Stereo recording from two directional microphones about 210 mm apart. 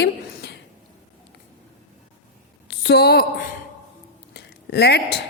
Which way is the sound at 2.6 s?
50° left (ahead or behind).